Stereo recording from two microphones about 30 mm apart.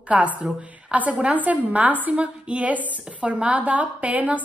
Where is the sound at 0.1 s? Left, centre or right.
Right.